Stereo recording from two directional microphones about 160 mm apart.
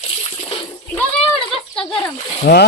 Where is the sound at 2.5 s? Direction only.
60° left (ahead or behind).